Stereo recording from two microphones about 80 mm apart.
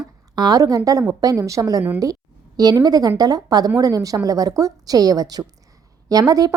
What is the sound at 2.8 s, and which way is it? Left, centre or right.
A woman's voice, right.